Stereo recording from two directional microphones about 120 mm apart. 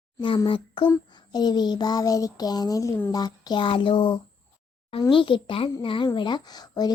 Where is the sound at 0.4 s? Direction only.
45° left (ahead or behind).